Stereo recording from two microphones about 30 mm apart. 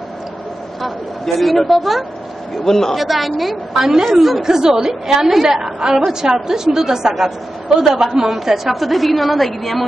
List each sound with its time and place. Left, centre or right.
1.3 s a man's voice: centre
1.7 s a woman's voice: centre
2.5 s a man's voice: centre
2.9 s a woman's voice: centre
4.4 s a woman's voice: centre